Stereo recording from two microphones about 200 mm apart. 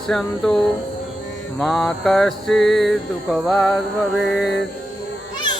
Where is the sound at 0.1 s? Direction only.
Centre (ahead or behind).